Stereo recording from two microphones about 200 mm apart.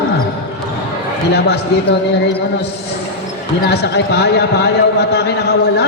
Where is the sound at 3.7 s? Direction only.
55° left (ahead or behind).